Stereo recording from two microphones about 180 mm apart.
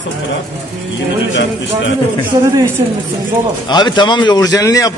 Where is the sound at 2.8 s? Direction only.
25° right (ahead or behind).